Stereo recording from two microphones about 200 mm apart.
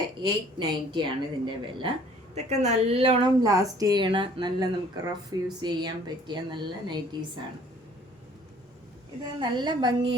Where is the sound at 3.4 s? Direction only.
15° right (ahead or behind).